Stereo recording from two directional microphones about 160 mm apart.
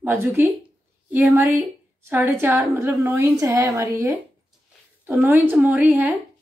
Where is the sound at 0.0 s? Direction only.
15° right (ahead or behind).